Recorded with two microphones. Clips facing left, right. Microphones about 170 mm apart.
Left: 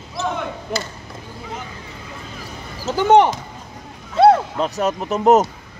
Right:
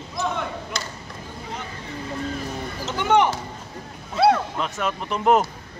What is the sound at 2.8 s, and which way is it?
Speech, 35° left (ahead or behind).